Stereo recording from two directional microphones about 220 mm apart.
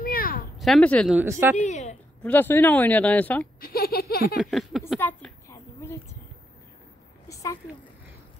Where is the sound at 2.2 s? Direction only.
10° left (ahead or behind).